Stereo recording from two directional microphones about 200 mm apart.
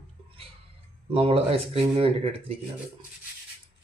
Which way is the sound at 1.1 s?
30° right (ahead or behind).